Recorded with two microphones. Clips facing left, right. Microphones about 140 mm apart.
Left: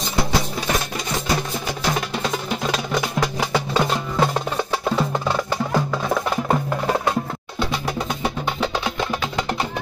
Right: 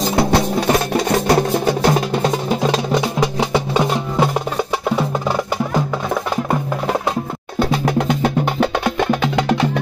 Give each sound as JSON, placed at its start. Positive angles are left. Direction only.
{"t": 0.1, "sound": "music", "side_deg": -65}
{"t": 2.0, "sound": "music", "side_deg": -30}
{"t": 3.2, "sound": "music", "side_deg": -15}
{"t": 4.8, "sound": "wood block", "side_deg": -15}
{"t": 7.5, "sound": "music", "side_deg": -50}
{"t": 8.1, "sound": "music", "side_deg": -65}